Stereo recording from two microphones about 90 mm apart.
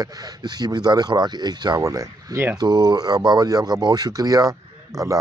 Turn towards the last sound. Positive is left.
turn(degrees=-40)  # may be behind; listen again after turning